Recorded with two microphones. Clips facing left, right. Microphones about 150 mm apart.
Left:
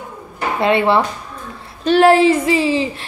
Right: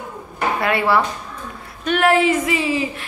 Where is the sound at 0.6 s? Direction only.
25° left (ahead or behind).